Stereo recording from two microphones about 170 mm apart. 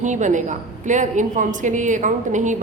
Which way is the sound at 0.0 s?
45° right (ahead or behind).